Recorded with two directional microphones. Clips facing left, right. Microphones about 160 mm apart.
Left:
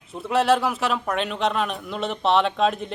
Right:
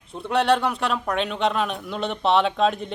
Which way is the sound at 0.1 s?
Centre (ahead or behind).